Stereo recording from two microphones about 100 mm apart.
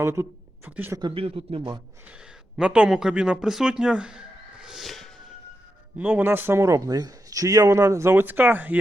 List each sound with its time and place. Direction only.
0.0 s speech: 25° right (ahead or behind)
1.1 s a man's voice: 65° right (ahead or behind)
2.6 s speech: 10° right (ahead or behind)
4.6 s a sound: centre (ahead or behind)
6.0 s a man's voice: 15° right (ahead or behind)